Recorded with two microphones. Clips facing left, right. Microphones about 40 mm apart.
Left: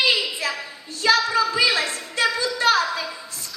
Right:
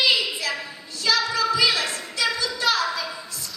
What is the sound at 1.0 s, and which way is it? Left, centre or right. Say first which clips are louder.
Child singing: left 4 dB; left.